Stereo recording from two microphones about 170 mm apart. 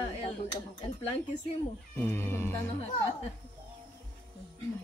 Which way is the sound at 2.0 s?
15° left (ahead or behind).